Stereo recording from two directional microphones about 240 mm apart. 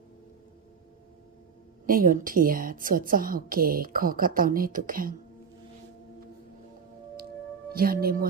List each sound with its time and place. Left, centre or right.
1.9 s a woman's voice: right
7.7 s a woman's voice: right